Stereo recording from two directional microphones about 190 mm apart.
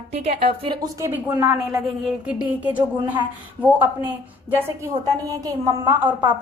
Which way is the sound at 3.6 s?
10° right (ahead or behind).